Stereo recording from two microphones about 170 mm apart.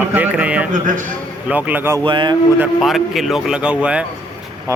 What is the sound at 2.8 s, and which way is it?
A man's voice, centre (ahead or behind).